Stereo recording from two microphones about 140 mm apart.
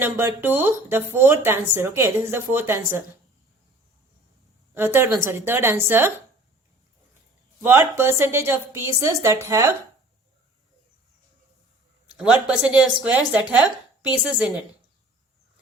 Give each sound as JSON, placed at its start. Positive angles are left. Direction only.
{"t": 0.0, "sound": "speech", "side_deg": -15}
{"t": 4.7, "sound": "speech", "side_deg": -15}
{"t": 7.6, "sound": "a woman's voice", "side_deg": -15}
{"t": 12.1, "sound": "speech", "side_deg": -10}